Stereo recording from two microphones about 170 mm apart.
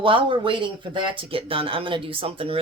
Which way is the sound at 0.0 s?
30° right (ahead or behind).